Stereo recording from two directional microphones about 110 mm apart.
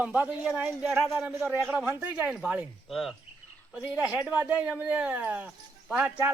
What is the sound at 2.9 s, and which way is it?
Cricket, centre (ahead or behind).